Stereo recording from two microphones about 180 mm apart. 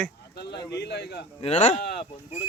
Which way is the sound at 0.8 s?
65° left (ahead or behind).